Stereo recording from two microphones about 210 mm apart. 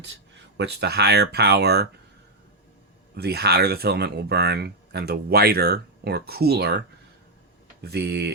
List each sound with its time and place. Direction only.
0.0 s speech: 55° right (ahead or behind)
3.2 s speech: 50° right (ahead or behind)